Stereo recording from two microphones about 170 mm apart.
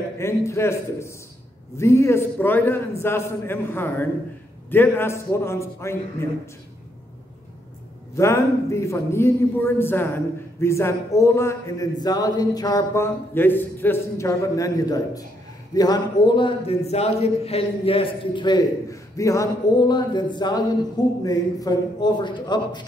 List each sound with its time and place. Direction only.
0.2 s a man's voice: 15° left (ahead or behind)
8.2 s a man's voice: 15° left (ahead or behind)